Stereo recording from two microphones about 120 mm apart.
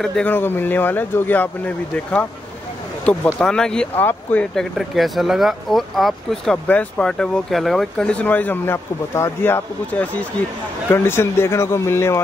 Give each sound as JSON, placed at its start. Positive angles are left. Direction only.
{"t": 0.0, "sound": "speech", "side_deg": 5}
{"t": 0.3, "sound": "speech", "side_deg": 15}
{"t": 3.3, "sound": "speech", "side_deg": 5}
{"t": 4.7, "sound": "speech", "side_deg": 0}